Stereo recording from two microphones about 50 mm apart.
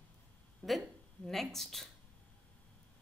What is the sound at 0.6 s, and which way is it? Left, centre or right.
A woman's voice, centre.